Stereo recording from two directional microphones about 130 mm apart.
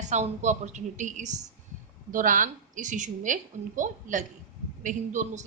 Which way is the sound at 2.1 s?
90° right.